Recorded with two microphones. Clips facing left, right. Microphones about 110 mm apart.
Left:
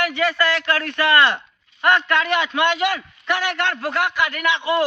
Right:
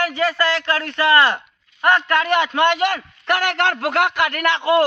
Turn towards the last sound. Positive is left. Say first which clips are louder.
# right 4 dB
turn(degrees=-50)  # may be behind; listen again after turning